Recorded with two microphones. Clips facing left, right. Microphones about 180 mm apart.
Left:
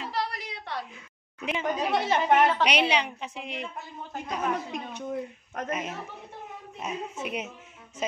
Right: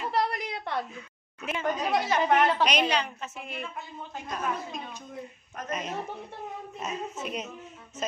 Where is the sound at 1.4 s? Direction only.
15° left (ahead or behind).